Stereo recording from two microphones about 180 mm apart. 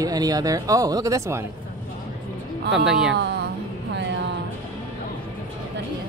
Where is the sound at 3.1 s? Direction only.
70° right (ahead or behind).